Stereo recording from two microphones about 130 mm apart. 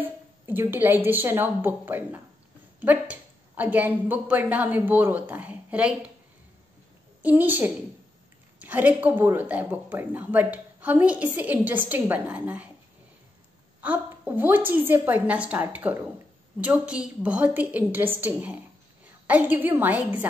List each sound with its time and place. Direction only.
0.0 s a woman's voice: 15° right (ahead or behind)
7.2 s a woman's voice: 15° right (ahead or behind)
13.7 s a woman's voice: 10° right (ahead or behind)